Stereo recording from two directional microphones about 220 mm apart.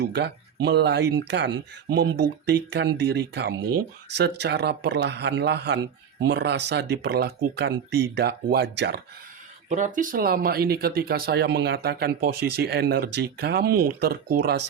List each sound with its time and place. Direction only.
0.0 s speech: 50° right (ahead or behind)
9.6 s speech: 35° right (ahead or behind)